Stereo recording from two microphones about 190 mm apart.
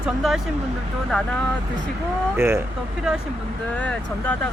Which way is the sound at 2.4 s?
15° right (ahead or behind).